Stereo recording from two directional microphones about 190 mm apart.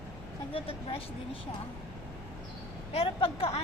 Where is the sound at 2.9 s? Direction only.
30° left (ahead or behind).